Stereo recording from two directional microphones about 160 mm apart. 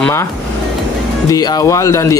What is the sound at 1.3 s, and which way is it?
Speech, 25° left (ahead or behind).